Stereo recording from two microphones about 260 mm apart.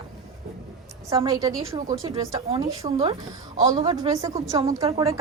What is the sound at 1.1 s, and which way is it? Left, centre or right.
A woman's voice, centre.